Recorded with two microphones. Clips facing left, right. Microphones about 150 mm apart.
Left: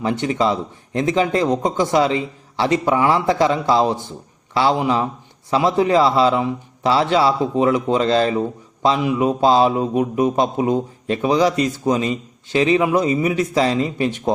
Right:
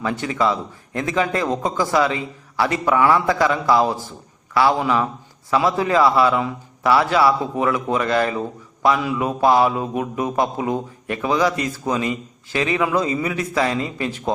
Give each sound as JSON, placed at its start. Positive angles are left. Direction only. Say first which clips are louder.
{"t": 0.0, "sound": "a man's voice", "louder": "left 2 dB", "side_deg": 25}